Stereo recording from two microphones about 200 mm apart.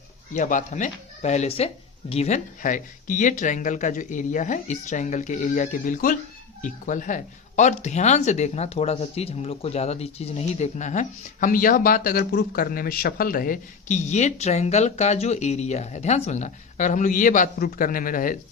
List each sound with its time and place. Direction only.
0.3 s speech: 40° left (ahead or behind)